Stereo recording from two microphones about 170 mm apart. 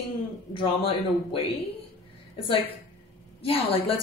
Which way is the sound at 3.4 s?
35° left (ahead or behind).